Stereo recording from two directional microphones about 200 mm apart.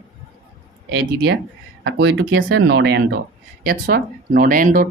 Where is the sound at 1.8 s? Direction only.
60° right (ahead or behind); by 4.9 s 45° right (ahead or behind).